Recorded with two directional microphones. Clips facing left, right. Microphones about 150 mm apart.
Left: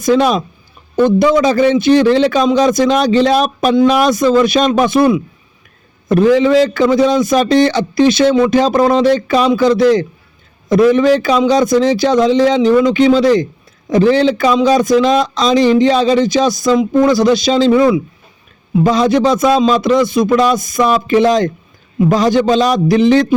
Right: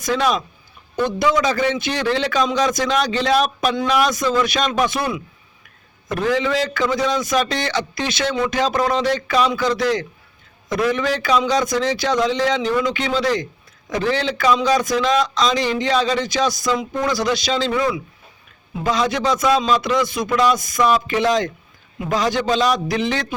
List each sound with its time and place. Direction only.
0.0 s a man's voice: 35° left (ahead or behind)